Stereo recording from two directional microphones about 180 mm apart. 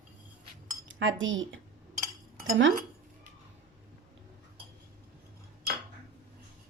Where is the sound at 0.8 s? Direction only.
90° right.